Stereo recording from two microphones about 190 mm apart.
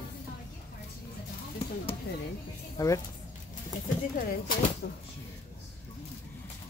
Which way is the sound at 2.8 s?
20° left (ahead or behind).